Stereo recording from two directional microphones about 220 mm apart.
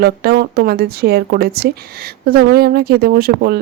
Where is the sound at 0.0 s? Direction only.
45° right (ahead or behind).